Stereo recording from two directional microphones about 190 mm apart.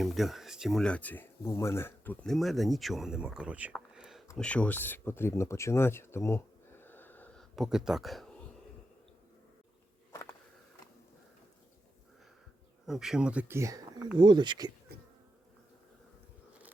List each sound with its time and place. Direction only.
0.0 s speech: centre (ahead or behind)
3.7 s a sound: centre (ahead or behind)
4.4 s speech: 5° left (ahead or behind)
7.5 s speech: centre (ahead or behind)
12.8 s speech: centre (ahead or behind); by 14.7 s 25° right (ahead or behind)
14.9 s insect: 60° right (ahead or behind)